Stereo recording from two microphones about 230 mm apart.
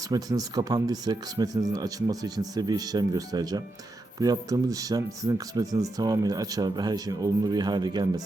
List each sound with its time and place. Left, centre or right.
0.1 s speech: centre